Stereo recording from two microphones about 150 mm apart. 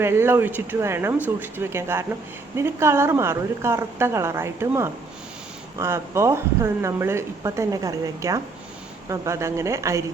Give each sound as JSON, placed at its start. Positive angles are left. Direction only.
{"t": 0.0, "sound": "a woman's voice", "side_deg": -15}